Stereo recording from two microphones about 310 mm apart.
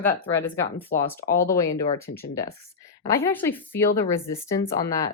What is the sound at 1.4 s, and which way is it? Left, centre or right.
A woman's voice, centre.